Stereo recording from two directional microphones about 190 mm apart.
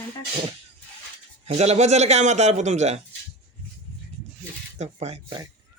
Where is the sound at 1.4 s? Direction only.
35° right (ahead or behind).